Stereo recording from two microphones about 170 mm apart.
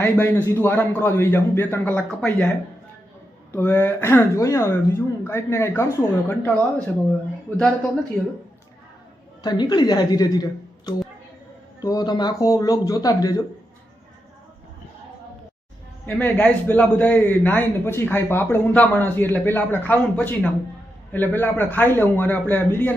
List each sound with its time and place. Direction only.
0.0 s a man's voice: 10° left (ahead or behind)
3.5 s a man's voice: 10° left (ahead or behind)
9.4 s speech: 25° left (ahead or behind)
16.0 s a man's voice: 10° left (ahead or behind)